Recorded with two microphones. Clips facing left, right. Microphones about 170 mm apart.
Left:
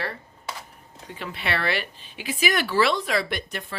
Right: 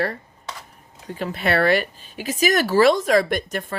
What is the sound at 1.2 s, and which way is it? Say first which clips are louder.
Speech: right 8 dB; 45° right (ahead or behind).